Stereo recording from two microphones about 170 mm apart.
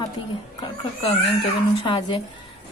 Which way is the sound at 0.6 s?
30° left (ahead or behind).